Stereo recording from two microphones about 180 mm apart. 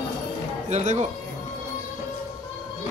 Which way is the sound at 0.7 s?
40° right (ahead or behind).